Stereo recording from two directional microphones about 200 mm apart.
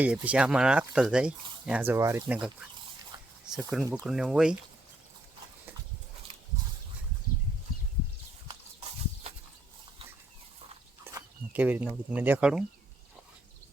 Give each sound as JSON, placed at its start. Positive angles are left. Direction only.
{"t": 0.0, "sound": "speech", "side_deg": -5}
{"t": 3.1, "sound": "dog", "side_deg": -20}
{"t": 3.5, "sound": "speech", "side_deg": -5}
{"t": 11.0, "sound": "speech", "side_deg": -10}